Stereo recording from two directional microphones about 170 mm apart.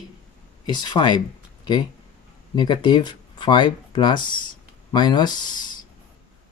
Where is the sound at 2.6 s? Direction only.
25° left (ahead or behind).